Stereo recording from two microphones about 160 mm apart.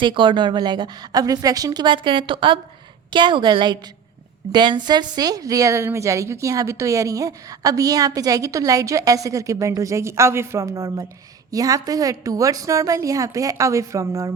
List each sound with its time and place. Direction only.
0.0 s a woman's voice: 30° right (ahead or behind)